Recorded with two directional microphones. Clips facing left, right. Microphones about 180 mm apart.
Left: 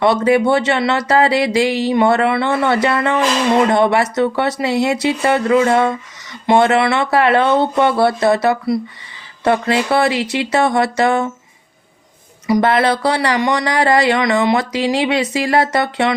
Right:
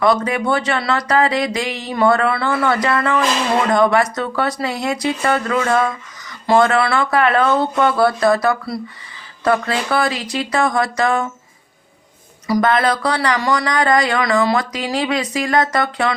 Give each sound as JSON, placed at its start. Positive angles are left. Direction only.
{"t": 0.0, "sound": "speech", "side_deg": 25}
{"t": 12.5, "sound": "speech", "side_deg": 25}